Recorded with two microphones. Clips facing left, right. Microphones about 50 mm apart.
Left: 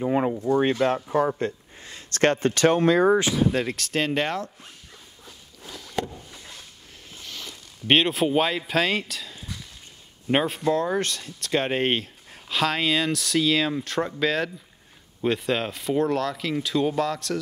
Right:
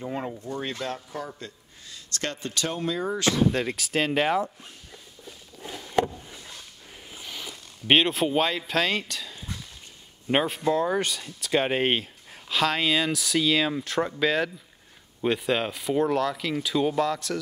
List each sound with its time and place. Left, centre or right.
0.0 s speech: left
3.3 s speech: centre
5.6 s a sound: right
7.1 s speech: centre